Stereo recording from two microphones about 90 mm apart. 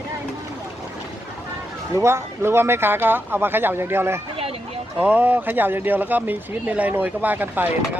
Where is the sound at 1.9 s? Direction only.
30° right (ahead or behind).